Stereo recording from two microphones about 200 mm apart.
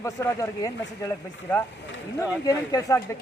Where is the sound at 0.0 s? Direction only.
15° left (ahead or behind).